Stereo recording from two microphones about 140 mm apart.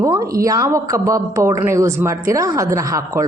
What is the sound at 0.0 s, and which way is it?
A woman's voice, 25° right (ahead or behind).